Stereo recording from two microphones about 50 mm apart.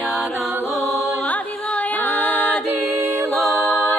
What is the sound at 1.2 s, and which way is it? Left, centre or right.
Music, left.